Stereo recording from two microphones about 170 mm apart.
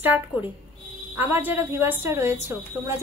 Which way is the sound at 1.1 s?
10° right (ahead or behind).